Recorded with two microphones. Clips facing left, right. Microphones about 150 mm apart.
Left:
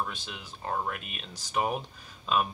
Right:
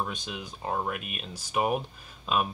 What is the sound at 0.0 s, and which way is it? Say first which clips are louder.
Speech: right 2 dB; 15° right (ahead or behind).